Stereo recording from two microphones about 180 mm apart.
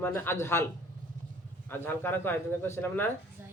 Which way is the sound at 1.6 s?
10° left (ahead or behind).